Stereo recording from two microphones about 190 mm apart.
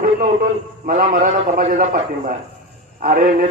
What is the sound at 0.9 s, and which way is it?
A man's voice, 45° right (ahead or behind).